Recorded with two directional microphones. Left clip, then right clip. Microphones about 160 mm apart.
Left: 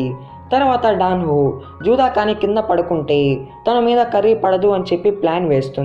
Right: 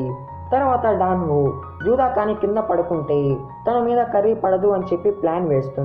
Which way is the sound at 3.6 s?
25° left (ahead or behind).